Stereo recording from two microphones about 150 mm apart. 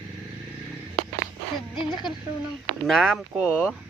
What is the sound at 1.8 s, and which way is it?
Speech, 30° left (ahead or behind).